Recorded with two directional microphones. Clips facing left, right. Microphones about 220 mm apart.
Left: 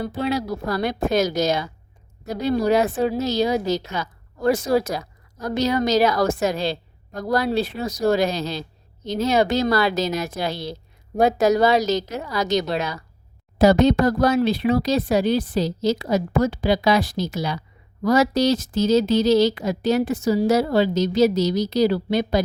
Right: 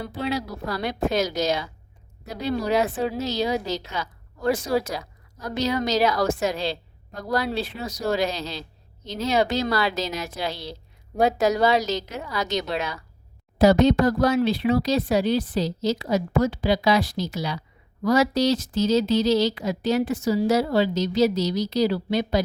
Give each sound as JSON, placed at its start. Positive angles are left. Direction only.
{"t": 0.0, "sound": "a woman's voice", "side_deg": 45}